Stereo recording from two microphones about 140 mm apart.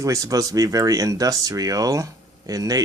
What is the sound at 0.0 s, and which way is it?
Speech, 25° right (ahead or behind).